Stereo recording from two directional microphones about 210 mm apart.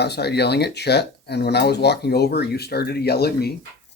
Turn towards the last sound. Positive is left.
turn(degrees=50)  # may be behind; listen again after turning